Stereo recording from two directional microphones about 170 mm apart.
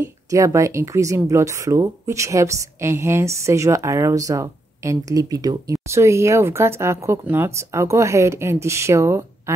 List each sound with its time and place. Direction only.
0.0 s speech: 20° right (ahead or behind)